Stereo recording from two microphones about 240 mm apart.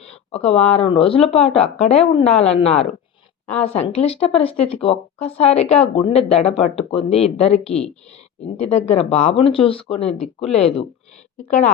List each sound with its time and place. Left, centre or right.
0.0 s speech: left